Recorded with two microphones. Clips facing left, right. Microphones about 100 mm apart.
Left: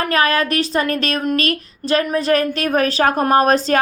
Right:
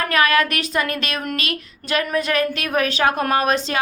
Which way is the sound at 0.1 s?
35° left (ahead or behind).